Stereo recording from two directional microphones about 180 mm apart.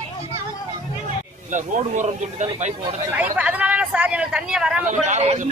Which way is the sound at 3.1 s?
10° right (ahead or behind).